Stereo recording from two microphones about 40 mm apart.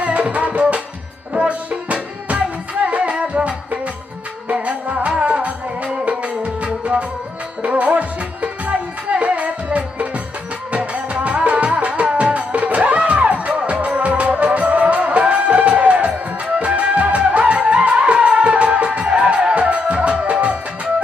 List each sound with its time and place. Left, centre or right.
0.0 s music: right
6.7 s music: right